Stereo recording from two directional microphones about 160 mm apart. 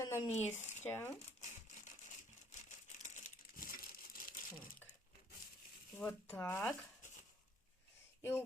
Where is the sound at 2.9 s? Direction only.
50° left (ahead or behind).